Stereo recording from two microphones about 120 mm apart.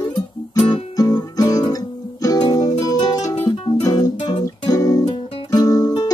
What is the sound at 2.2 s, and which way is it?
Music, 35° left (ahead or behind).